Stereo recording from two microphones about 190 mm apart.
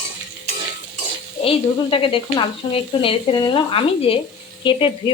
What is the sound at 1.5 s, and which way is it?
Sizzle, 30° left (ahead or behind).